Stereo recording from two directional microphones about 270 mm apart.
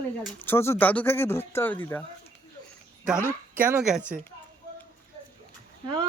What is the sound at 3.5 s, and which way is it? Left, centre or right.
Speech, centre.